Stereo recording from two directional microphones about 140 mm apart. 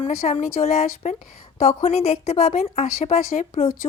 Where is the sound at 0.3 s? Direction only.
50° left (ahead or behind).